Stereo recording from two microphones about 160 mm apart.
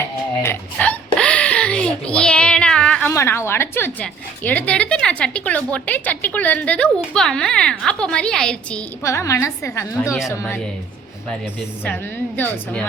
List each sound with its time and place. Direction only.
0.4 s a sound: 10° left (ahead or behind)
3.1 s a woman's voice: 15° left (ahead or behind)
9.0 s a woman's voice: 20° left (ahead or behind)